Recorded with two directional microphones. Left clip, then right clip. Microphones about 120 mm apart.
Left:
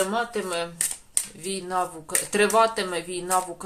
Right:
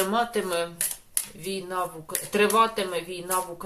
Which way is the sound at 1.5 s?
35° left (ahead or behind).